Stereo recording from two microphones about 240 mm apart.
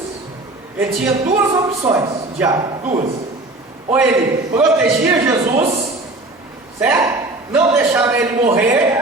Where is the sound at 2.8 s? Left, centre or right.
Right.